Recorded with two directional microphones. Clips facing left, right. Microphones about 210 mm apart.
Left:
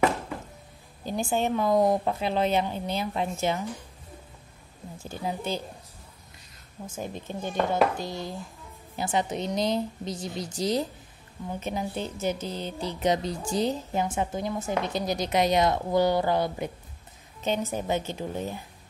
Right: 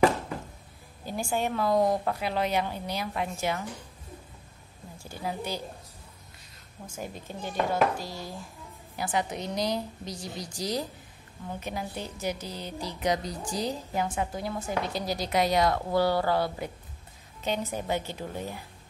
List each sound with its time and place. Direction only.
1.0 s a woman's voice: 20° left (ahead or behind)
5.0 s a woman's voice: 20° left (ahead or behind)
7.0 s a woman's voice: 25° left (ahead or behind)